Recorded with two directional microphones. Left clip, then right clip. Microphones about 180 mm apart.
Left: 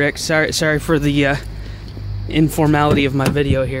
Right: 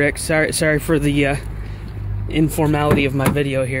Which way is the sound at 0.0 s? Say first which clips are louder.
Left 1 dB; 10° left (ahead or behind).